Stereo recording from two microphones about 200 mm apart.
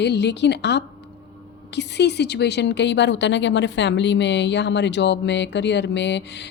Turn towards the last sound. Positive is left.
turn(degrees=60)  # may be behind; listen again after turning